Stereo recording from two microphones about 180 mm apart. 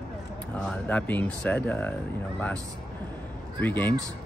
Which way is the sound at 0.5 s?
10° left (ahead or behind).